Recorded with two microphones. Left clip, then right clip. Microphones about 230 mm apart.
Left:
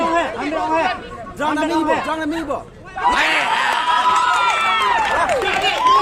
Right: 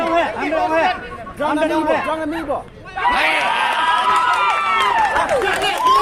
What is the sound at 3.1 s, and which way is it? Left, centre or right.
Speech, left.